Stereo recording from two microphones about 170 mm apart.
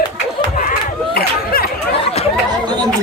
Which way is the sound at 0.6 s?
60° left (ahead or behind).